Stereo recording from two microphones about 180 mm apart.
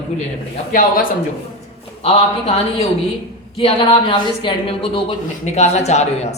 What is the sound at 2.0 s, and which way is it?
Speech, 30° left (ahead or behind).